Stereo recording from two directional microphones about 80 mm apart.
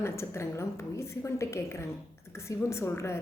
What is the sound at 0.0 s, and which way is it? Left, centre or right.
A woman's voice, left.